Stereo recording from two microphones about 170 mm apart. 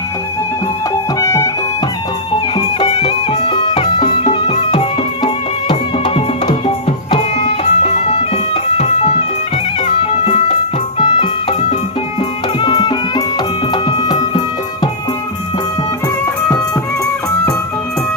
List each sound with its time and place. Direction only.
1.2 s music: 20° left (ahead or behind)
2.6 s music: 35° left (ahead or behind)
12.5 s music: 25° left (ahead or behind)